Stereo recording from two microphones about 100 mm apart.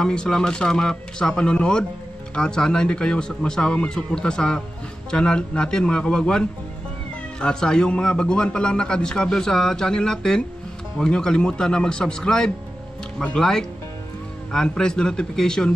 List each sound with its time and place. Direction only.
0.0 s speech: 5° left (ahead or behind)